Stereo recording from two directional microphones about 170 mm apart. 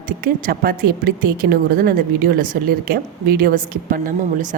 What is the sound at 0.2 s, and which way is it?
A woman's voice, 60° right (ahead or behind).